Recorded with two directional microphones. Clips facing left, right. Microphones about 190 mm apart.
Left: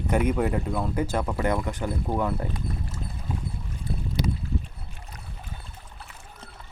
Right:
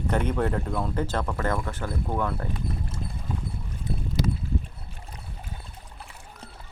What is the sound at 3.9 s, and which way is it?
Boat, 20° right (ahead or behind).